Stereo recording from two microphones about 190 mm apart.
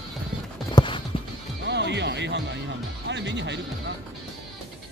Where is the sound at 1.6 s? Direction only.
65° right (ahead or behind).